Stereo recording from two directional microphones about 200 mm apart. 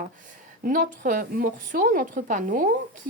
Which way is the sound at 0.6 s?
40° right (ahead or behind).